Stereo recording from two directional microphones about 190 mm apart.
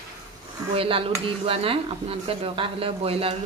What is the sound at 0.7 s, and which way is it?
Speech, 30° right (ahead or behind).